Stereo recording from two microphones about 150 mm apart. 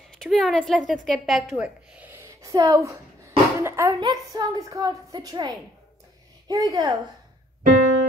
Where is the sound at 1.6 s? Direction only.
10° right (ahead or behind).